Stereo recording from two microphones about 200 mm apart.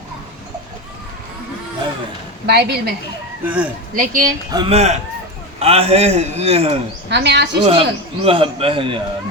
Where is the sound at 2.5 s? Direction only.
55° right (ahead or behind).